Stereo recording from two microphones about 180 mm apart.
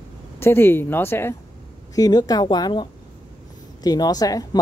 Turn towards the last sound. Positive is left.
turn(degrees=20)  # may be behind; listen again after turning